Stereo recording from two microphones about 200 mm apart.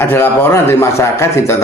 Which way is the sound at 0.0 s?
10° left (ahead or behind).